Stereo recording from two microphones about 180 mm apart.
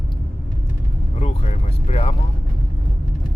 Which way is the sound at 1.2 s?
40° left (ahead or behind).